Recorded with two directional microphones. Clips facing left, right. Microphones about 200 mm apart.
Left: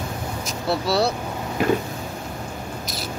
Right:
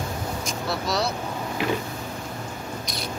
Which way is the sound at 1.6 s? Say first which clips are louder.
Left 6 dB; 45° left (ahead or behind).